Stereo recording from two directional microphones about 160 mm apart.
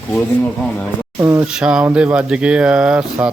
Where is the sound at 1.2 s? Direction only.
15° right (ahead or behind).